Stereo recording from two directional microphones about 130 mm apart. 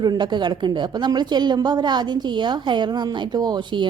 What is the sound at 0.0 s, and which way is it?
A woman's voice, 35° right (ahead or behind).